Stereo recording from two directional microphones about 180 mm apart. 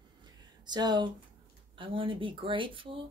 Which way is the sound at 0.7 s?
25° right (ahead or behind).